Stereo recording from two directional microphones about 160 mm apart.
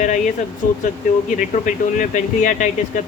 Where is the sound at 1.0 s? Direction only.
55° left (ahead or behind).